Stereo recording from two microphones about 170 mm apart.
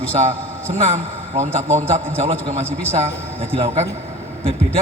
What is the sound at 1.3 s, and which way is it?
Speech, 40° right (ahead or behind).